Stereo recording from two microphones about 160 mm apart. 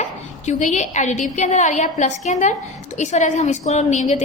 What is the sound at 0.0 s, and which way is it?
A woman's voice, 45° left (ahead or behind).